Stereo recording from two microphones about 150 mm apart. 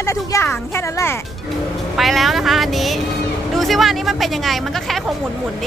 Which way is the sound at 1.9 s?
Centre (ahead or behind).